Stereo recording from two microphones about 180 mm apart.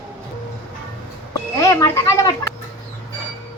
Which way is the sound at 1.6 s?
15° left (ahead or behind).